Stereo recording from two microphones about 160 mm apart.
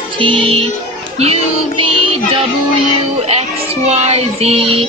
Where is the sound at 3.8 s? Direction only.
45° right (ahead or behind).